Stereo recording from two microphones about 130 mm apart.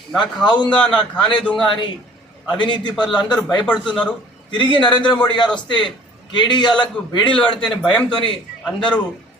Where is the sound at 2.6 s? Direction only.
35° left (ahead or behind).